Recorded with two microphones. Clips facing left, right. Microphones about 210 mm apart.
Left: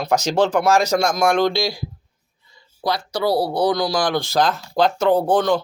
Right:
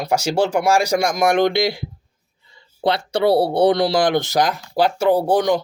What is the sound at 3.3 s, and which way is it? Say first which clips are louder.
Speech: right 3 dB; 30° right (ahead or behind).